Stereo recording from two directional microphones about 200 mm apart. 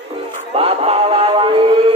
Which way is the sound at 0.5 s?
30° right (ahead or behind).